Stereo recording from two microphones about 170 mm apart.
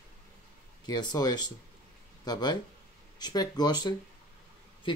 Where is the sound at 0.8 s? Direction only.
25° left (ahead or behind).